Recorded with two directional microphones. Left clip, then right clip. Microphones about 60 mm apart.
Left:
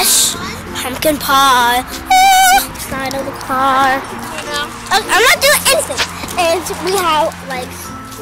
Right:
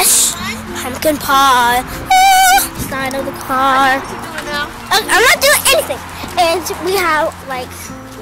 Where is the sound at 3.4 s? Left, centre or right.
Right.